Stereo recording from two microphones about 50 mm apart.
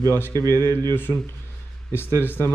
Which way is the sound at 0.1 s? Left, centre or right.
Left.